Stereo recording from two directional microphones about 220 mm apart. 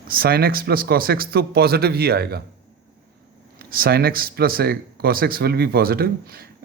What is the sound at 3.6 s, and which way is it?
Speech, 40° right (ahead or behind).